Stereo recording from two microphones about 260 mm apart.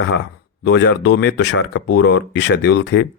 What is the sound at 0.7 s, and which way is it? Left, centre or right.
Speech, left.